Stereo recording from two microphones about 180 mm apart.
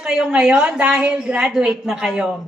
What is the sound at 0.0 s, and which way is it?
A woman's voice, 5° right (ahead or behind).